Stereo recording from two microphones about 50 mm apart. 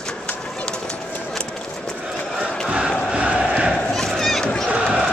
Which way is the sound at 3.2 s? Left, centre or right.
Right.